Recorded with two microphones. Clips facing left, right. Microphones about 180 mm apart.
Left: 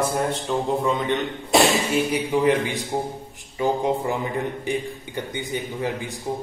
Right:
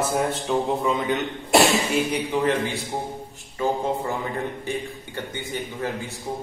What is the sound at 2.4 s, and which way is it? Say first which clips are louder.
A man's voice: left 3 dB; 10° left (ahead or behind).